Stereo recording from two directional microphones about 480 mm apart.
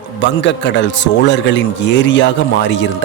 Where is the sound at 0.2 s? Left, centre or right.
Left.